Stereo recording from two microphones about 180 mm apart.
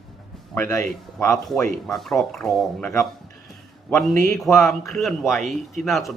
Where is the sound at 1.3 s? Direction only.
Centre (ahead or behind).